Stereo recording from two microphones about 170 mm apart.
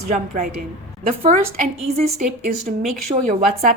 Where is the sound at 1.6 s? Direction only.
45° right (ahead or behind).